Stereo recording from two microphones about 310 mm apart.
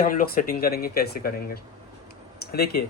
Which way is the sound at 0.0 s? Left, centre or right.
Left.